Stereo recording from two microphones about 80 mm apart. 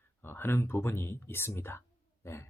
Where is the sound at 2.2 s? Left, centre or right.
Left.